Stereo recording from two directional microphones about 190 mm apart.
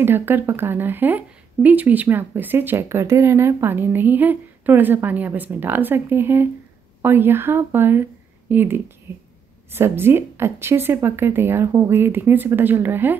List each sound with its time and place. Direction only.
0.0 s speech: 10° right (ahead or behind)